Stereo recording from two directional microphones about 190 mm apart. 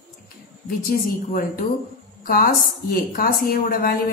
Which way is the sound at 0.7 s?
50° left (ahead or behind).